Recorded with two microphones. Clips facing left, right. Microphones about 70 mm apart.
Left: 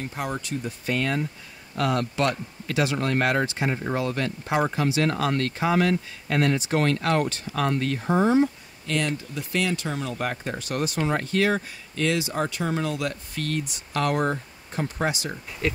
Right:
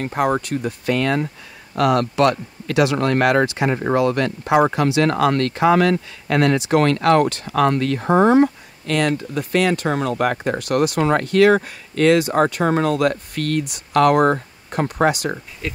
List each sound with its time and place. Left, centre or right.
0.0 s speech: right